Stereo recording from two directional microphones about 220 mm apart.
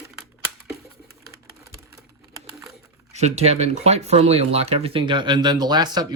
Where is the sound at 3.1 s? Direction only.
30° right (ahead or behind).